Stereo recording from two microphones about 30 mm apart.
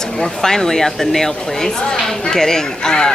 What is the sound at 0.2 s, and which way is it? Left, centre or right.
A woman's voice, centre.